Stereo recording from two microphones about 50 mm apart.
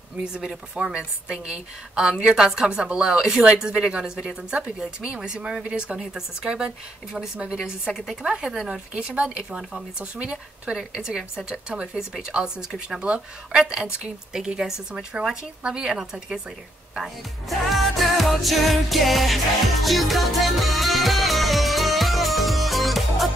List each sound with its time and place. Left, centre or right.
0.2 s a woman's voice: centre
7.9 s a woman's voice: centre
8.6 s a woman's voice: centre
9.1 s a woman's voice: right; by 16.3 s centre
17.5 s music: centre